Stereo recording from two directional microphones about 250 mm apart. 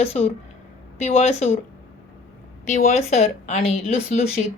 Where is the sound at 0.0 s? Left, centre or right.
Left.